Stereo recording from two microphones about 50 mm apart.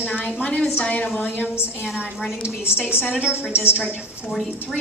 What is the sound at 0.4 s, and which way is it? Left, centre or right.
A woman's voice, left.